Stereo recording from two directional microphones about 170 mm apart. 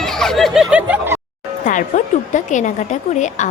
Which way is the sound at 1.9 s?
45° left (ahead or behind).